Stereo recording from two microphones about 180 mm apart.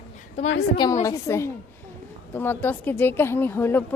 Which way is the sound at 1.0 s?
15° left (ahead or behind).